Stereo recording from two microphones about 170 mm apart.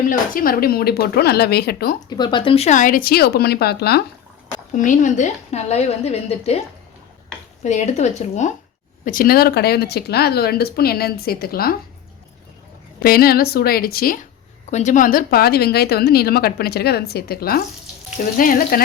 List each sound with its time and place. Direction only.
0.0 s a woman's voice: 55° left (ahead or behind)
2.0 s speech: 25° left (ahead or behind)
2.6 s a woman's voice: 50° left (ahead or behind); by 4.0 s 70° left (ahead or behind)
4.7 s a woman's voice: 45° left (ahead or behind)
7.6 s speech: 45° left (ahead or behind)
9.0 s a woman's voice: 60° left (ahead or behind)
13.0 s a woman's voice: 60° left (ahead or behind)
14.7 s a woman's voice: 45° left (ahead or behind)